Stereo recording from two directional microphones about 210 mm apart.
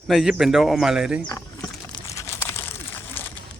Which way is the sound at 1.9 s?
15° left (ahead or behind).